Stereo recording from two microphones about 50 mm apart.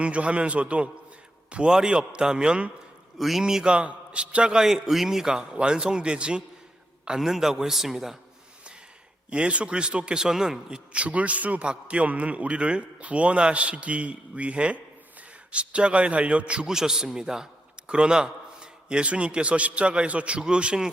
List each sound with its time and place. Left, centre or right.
0.0 s a man's voice: right
3.2 s speech: centre; by 4.6 s right
4.6 s speech: centre
7.2 s speech: centre
9.3 s a man's voice: right
10.9 s a man's voice: right
16.6 s a man's voice: centre